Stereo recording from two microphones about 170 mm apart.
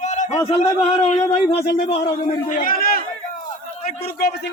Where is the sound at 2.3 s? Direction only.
50° left (ahead or behind).